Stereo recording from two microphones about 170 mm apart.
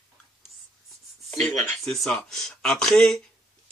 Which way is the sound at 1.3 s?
5° left (ahead or behind).